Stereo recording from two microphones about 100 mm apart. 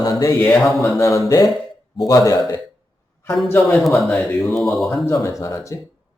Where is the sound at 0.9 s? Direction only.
30° left (ahead or behind).